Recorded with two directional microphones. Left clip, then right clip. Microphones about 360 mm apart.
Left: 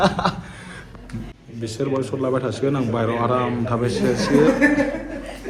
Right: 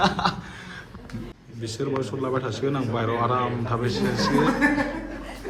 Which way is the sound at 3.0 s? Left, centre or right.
Left.